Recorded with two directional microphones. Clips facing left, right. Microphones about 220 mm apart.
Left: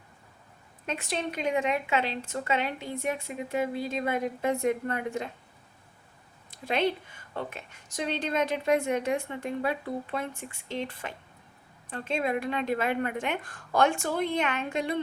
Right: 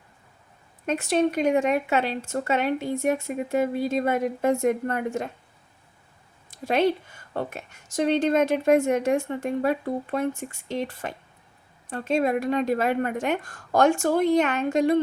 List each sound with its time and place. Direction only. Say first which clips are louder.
0.9 s a woman's voice: right 10 dB; 45° right (ahead or behind)
6.5 s a sound: right 6 dB; 45° right (ahead or behind)
7.3 s a woman's voice: right 5 dB; 45° right (ahead or behind)